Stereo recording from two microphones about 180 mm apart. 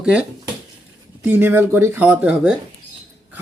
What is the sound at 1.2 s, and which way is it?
Speech, 10° right (ahead or behind).